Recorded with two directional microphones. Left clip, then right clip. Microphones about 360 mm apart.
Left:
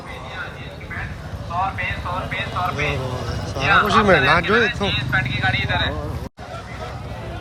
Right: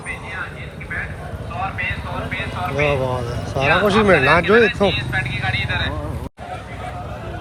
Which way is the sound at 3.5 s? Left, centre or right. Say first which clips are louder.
Even; centre.